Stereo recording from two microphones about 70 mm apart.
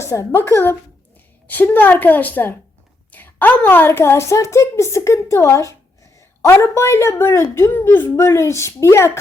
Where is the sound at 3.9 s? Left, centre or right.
Left.